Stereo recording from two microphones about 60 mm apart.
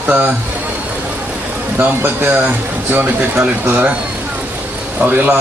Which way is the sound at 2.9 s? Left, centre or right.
Right.